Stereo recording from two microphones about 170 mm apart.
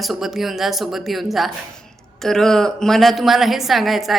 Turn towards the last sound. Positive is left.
turn(degrees=0)  # may be behind; listen again after turning